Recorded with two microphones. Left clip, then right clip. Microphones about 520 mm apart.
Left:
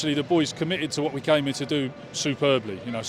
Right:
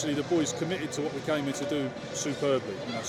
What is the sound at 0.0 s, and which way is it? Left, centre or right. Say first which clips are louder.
Speech: left 5 dB; left.